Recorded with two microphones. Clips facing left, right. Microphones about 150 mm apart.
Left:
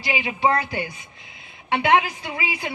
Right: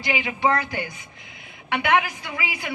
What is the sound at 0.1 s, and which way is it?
Speech, 20° left (ahead or behind).